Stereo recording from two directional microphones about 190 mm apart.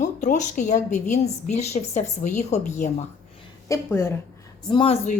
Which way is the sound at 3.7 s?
15° left (ahead or behind).